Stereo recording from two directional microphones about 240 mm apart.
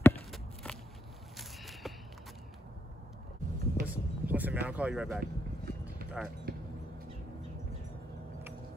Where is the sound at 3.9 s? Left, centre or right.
Centre.